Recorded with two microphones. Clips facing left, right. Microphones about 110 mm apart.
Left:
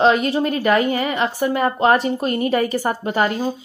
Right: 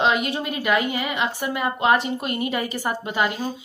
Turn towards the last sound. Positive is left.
turn(degrees=40)  # may be behind; listen again after turning